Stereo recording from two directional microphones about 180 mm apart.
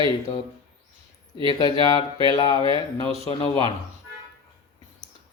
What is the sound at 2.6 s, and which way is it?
Speech, 30° right (ahead or behind).